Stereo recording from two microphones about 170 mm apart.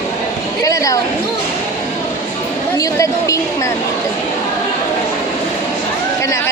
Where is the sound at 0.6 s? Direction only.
20° left (ahead or behind).